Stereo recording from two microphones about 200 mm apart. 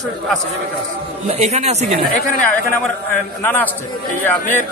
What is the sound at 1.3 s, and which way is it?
Speech, 35° right (ahead or behind).